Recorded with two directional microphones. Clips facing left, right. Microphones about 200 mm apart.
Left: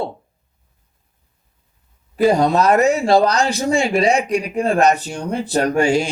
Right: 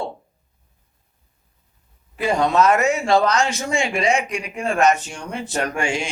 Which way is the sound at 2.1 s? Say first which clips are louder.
Left 4 dB; 35° left (ahead or behind).